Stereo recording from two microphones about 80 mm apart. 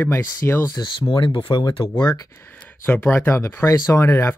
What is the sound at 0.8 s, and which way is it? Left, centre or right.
Speech, left.